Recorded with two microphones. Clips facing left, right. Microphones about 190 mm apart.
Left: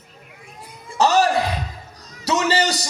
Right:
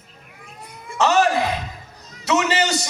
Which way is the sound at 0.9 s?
35° left (ahead or behind).